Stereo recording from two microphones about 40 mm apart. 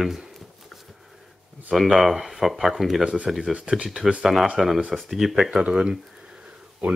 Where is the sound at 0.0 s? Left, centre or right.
Centre.